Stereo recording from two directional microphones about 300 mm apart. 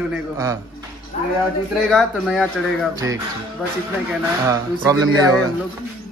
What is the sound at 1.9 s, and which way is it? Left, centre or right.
Speech, centre.